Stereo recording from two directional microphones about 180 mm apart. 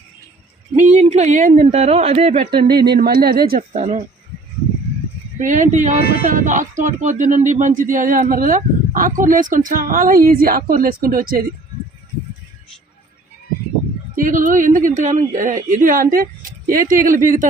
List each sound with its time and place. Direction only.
0.8 s speech: 40° right (ahead or behind)
2.6 s speech: 65° right (ahead or behind)
3.7 s speech: 40° right (ahead or behind)
5.4 s speech: 45° right (ahead or behind)
6.0 s speech: 60° left (ahead or behind)
6.2 s speech: 45° right (ahead or behind)
14.2 s speech: 45° right (ahead or behind)